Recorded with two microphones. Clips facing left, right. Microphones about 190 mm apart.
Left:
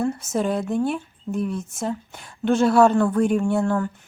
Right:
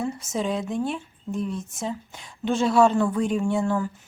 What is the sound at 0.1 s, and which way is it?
A woman's voice, centre (ahead or behind).